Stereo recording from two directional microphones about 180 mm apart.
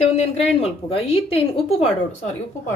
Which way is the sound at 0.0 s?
35° left (ahead or behind).